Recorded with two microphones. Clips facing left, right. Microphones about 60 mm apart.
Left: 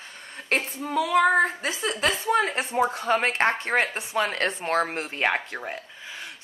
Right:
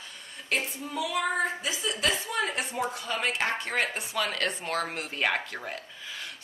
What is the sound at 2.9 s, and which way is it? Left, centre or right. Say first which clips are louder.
Speech: left 7 dB; left.